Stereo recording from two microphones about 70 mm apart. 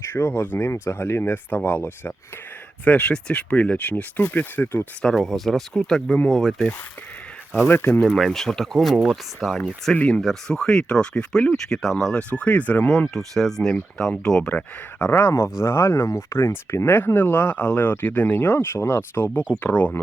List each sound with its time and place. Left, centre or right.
0.0 s speech: left
2.8 s speech: centre
5.1 s speech: centre
7.5 s speech: left
8.0 s speech: centre
12.3 s speech: left
13.1 s speech: centre
14.5 s speech: left
18.3 s speech: left